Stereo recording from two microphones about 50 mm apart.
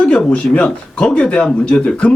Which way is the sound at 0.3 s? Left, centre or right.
Left.